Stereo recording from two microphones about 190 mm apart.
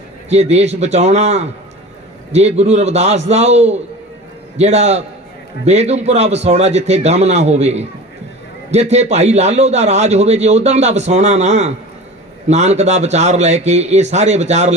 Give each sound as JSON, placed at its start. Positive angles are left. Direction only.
{"t": 0.3, "sound": "a man's voice", "side_deg": -35}